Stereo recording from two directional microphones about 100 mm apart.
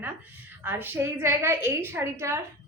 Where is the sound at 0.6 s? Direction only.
20° right (ahead or behind).